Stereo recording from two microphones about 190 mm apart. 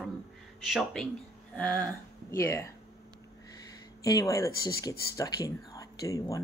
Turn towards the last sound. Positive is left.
turn(degrees=15)  # may be behind; listen again after turning